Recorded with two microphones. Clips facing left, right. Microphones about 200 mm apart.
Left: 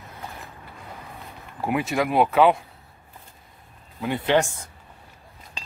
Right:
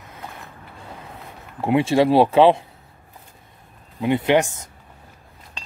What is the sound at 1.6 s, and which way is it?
Speech, 25° right (ahead or behind).